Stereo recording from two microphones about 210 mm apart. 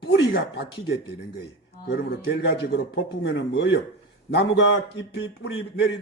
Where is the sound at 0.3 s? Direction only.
50° left (ahead or behind).